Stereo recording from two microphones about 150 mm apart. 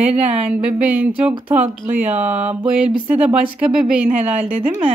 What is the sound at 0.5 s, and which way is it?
A woman's voice, 10° right (ahead or behind).